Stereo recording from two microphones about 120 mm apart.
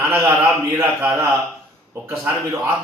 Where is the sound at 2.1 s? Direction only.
10° right (ahead or behind).